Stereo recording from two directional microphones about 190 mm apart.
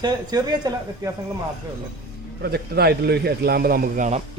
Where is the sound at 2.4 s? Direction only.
55° right (ahead or behind).